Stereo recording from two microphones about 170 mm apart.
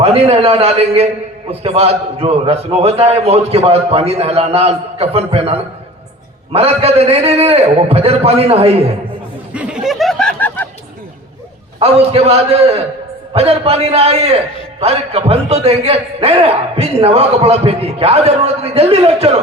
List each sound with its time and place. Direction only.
0.0 s a man's voice: 35° right (ahead or behind)
9.5 s a sound: 5° right (ahead or behind); by 10.7 s 10° left (ahead or behind)
11.8 s a man's voice: 35° right (ahead or behind)